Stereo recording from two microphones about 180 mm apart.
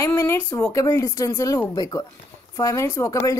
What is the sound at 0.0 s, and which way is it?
Speech, 15° left (ahead or behind).